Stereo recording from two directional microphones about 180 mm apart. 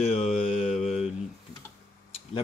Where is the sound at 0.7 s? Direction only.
Centre (ahead or behind).